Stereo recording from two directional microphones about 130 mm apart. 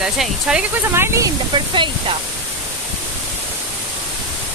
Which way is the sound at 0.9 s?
20° right (ahead or behind).